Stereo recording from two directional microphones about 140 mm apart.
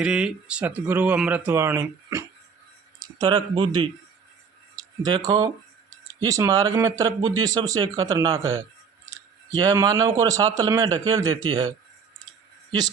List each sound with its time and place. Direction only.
0.0 s speech: 5° right (ahead or behind); by 3.8 s 35° right (ahead or behind)
5.0 s speech: 30° right (ahead or behind)